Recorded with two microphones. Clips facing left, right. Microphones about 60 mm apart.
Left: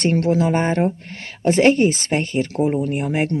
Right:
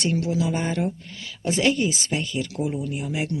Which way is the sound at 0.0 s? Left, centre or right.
Left.